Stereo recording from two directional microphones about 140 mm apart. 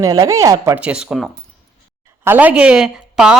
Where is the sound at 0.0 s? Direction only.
25° right (ahead or behind).